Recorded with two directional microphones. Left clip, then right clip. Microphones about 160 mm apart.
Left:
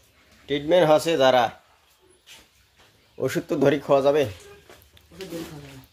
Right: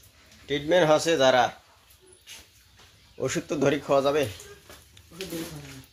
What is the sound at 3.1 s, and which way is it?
Speech, 25° left (ahead or behind).